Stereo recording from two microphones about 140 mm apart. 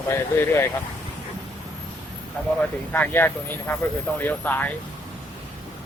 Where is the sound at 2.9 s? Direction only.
15° left (ahead or behind).